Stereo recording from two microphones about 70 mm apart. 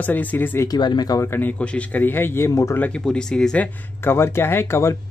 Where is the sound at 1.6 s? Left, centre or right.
Left.